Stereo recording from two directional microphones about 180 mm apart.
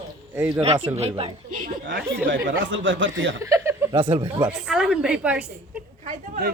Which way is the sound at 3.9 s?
25° right (ahead or behind).